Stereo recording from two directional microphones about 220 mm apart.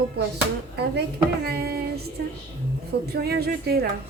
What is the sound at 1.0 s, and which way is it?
Child singing, 45° right (ahead or behind).